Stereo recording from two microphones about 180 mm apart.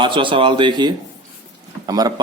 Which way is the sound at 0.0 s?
30° right (ahead or behind).